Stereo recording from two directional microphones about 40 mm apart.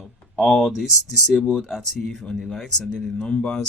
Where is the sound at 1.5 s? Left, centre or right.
Centre.